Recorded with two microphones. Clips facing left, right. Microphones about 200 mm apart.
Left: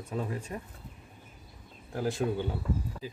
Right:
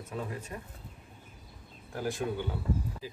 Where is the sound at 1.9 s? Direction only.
30° left (ahead or behind).